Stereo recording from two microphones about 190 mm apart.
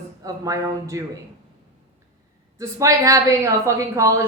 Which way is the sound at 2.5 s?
15° right (ahead or behind).